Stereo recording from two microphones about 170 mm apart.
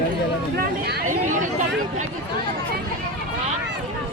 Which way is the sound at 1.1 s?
50° right (ahead or behind).